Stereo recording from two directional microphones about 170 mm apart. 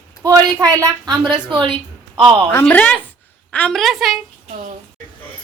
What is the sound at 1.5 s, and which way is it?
Speech, 30° right (ahead or behind).